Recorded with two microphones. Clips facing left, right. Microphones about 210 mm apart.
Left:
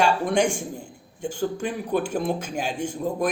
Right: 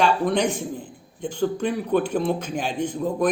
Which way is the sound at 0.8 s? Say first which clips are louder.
Even; 10° left (ahead or behind).